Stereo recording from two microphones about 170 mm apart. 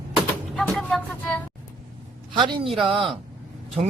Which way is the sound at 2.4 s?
30° right (ahead or behind).